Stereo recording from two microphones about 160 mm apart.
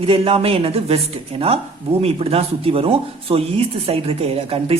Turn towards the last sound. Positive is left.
turn(degrees=-40)  # may be behind; listen again after turning